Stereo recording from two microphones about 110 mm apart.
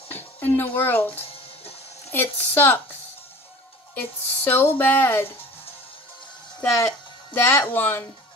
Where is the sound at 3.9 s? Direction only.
20° left (ahead or behind).